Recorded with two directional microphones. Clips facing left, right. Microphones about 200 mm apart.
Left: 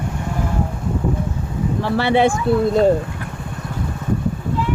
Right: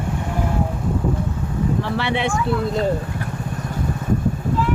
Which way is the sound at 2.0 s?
40° left (ahead or behind).